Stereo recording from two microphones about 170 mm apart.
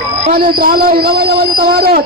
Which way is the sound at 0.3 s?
60° right (ahead or behind).